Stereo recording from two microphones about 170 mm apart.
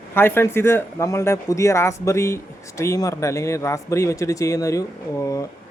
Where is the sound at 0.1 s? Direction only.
15° left (ahead or behind).